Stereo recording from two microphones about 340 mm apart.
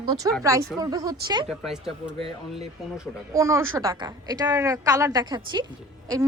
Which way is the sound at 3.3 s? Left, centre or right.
Centre.